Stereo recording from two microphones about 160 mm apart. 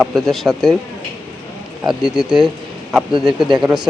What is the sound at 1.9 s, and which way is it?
Speech, 5° right (ahead or behind).